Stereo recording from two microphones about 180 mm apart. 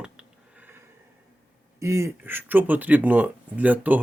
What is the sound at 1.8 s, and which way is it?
Speech, 15° right (ahead or behind).